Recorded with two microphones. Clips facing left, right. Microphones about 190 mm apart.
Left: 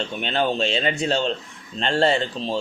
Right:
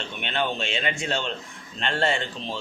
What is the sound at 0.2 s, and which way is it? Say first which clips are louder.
Speech: left 5 dB; 35° left (ahead or behind).